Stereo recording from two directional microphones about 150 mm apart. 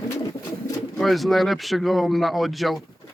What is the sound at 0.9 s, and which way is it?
A man's voice, centre (ahead or behind).